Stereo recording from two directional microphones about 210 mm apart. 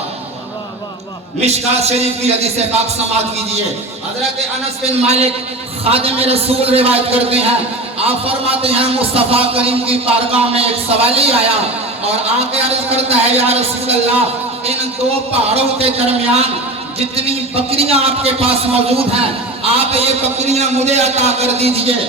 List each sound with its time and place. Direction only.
1.4 s a man's voice: 30° right (ahead or behind)
4.9 s a man's voice: 30° right (ahead or behind)
12.9 s a man's voice: 30° right (ahead or behind)